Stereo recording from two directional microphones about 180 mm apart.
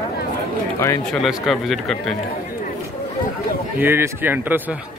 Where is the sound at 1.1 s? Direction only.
Centre (ahead or behind).